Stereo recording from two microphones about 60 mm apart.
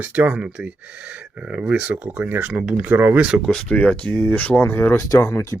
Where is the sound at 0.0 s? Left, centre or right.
Right.